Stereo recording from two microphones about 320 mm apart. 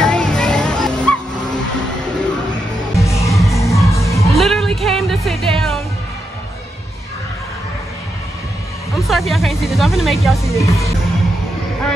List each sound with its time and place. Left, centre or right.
0.0 s music: centre
3.0 s music: centre
8.9 s music: centre
10.2 s speech: centre